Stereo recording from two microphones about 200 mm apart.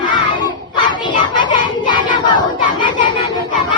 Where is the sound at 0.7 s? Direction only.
20° left (ahead or behind).